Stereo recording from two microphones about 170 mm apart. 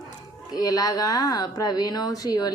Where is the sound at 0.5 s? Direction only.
20° left (ahead or behind).